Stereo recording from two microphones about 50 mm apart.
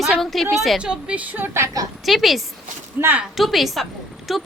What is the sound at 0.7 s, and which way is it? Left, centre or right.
Speech, centre.